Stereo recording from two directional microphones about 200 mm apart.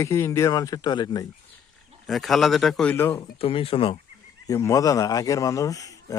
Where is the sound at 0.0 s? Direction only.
15° left (ahead or behind).